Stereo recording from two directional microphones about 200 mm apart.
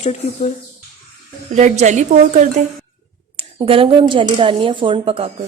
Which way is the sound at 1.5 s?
35° right (ahead or behind).